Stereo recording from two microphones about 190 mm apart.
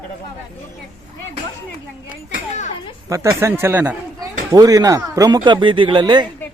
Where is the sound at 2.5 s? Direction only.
35° left (ahead or behind).